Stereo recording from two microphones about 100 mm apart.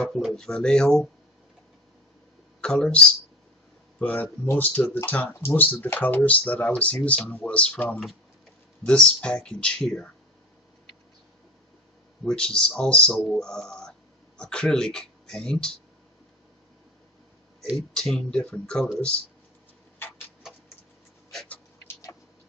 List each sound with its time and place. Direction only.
0.0 s speech: 5° left (ahead or behind)
2.6 s speech: 10° left (ahead or behind)
12.3 s speech: 10° left (ahead or behind)
17.7 s speech: 5° left (ahead or behind)